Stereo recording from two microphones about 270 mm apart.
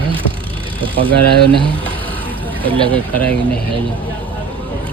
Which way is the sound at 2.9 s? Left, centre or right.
Centre.